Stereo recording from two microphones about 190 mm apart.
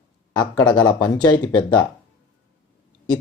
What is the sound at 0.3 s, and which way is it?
Speech, 25° left (ahead or behind).